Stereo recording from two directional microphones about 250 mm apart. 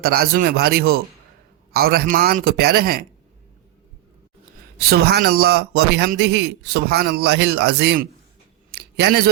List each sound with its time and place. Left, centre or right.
0.0 s a man's voice: right
4.8 s a man's voice: right
8.7 s a sound: right